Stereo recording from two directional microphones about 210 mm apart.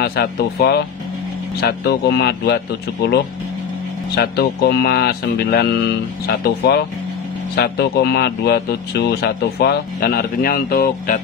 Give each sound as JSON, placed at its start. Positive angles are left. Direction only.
{"t": 0.0, "sound": "speech", "side_deg": 50}